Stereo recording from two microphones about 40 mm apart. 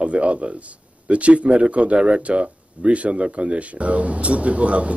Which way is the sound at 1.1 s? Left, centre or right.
Right.